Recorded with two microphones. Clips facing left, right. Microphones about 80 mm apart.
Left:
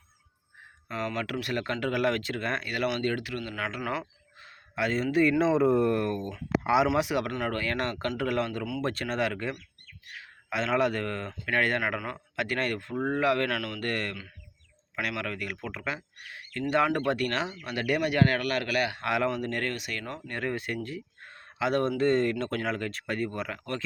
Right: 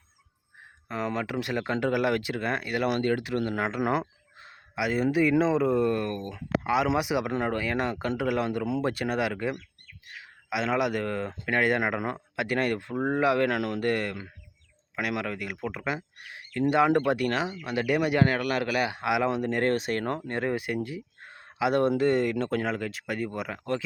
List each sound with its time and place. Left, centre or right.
0.9 s a man's voice: centre
3.2 s speech: right
4.7 s speech: centre
5.4 s speech: centre
6.8 s a man's voice: centre
19.6 s speech: right
20.2 s a man's voice: right